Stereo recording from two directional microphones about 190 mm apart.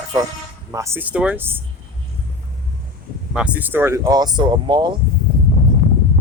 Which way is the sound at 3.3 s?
5° right (ahead or behind).